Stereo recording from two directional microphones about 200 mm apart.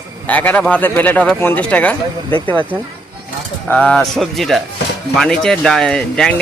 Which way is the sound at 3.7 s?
5° left (ahead or behind).